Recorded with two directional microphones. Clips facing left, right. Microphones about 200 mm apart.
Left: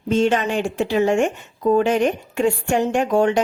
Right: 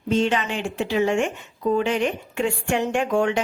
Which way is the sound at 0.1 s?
45° left (ahead or behind).